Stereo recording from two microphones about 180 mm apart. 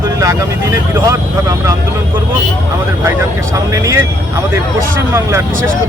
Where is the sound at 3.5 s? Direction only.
20° right (ahead or behind).